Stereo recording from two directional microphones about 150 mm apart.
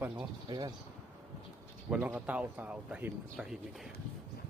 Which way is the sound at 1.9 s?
10° right (ahead or behind).